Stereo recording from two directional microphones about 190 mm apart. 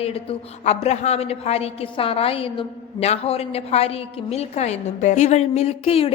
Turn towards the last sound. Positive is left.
turn(degrees=30)  # may be behind; listen again after turning